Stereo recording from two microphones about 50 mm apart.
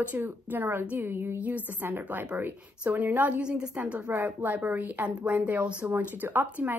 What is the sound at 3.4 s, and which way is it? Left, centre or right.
A woman's voice, right.